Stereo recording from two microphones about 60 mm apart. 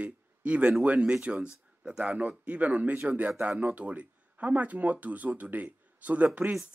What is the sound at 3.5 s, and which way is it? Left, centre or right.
Speech, right.